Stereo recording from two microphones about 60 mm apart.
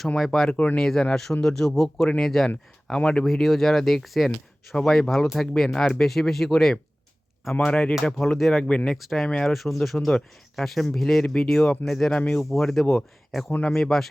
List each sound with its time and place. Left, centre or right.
0.5 s speech: left
0.8 s speech: centre
3.2 s speech: centre
8.2 s speech: centre
8.6 s speech: centre
9.0 s speech: centre
9.2 s speech: centre
9.5 s speech: centre